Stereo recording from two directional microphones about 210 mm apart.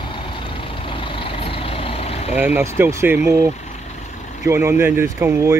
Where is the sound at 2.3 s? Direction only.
10° right (ahead or behind).